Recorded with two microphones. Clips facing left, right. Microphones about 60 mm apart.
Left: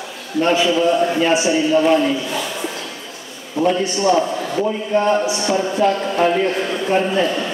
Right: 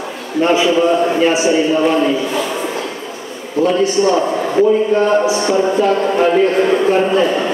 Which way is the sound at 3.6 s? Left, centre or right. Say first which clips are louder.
Right 4 dB; right.